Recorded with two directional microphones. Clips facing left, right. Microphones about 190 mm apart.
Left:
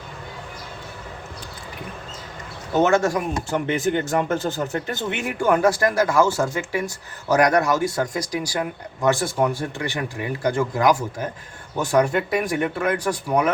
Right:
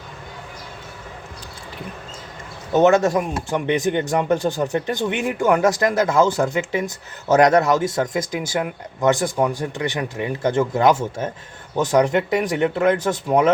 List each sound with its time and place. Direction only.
2.7 s speech: 20° right (ahead or behind)